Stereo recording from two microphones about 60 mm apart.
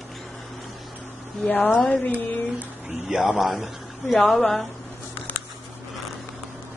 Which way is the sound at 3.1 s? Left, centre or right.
Centre.